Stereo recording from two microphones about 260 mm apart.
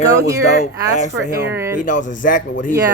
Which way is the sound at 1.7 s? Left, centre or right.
Left.